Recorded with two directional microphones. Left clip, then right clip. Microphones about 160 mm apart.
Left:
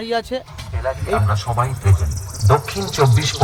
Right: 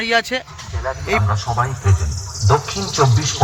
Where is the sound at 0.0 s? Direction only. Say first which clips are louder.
Right 4 dB; centre (ahead or behind).